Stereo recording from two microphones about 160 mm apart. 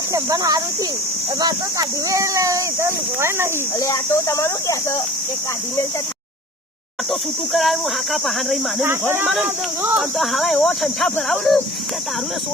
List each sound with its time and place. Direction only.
0.1 s speech: 20° right (ahead or behind)
3.8 s speech: 20° left (ahead or behind)
7.1 s speech: centre (ahead or behind)
8.8 s speech: 15° right (ahead or behind); by 11.6 s centre (ahead or behind)